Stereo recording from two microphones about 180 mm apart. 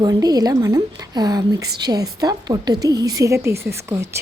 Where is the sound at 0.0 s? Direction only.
20° right (ahead or behind).